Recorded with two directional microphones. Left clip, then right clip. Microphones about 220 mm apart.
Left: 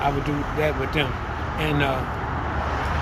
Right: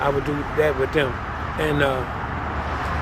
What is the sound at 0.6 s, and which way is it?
Speech, 20° right (ahead or behind).